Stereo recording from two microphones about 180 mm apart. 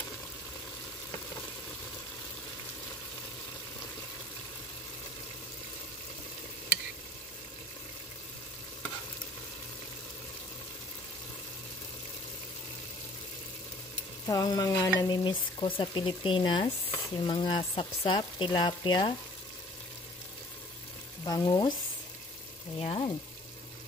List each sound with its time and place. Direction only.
14.2 s speech: 20° left (ahead or behind)
21.2 s frying: 20° left (ahead or behind)
22.8 s speech: 30° left (ahead or behind)